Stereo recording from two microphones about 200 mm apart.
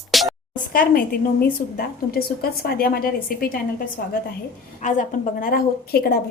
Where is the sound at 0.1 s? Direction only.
Centre (ahead or behind).